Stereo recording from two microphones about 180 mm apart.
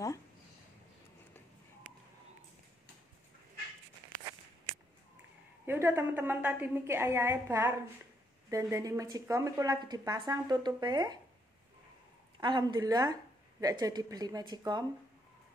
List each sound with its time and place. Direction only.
5.7 s a woman's voice: 15° right (ahead or behind)
12.4 s speech: 25° right (ahead or behind)